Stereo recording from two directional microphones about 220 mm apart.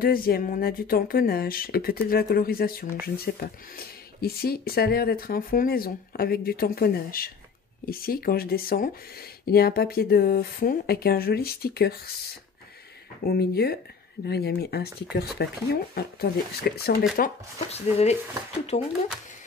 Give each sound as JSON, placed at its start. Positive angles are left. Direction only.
{"t": 0.0, "sound": "speech", "side_deg": 40}
{"t": 13.2, "sound": "speech", "side_deg": 45}
{"t": 17.6, "sound": "speech", "side_deg": 30}